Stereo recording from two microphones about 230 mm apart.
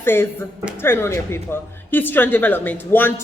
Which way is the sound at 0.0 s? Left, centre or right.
Centre.